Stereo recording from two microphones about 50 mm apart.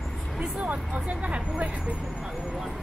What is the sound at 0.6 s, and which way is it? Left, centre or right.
Speech, right.